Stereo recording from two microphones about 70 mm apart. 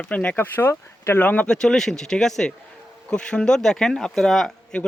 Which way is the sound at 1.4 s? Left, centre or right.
Centre.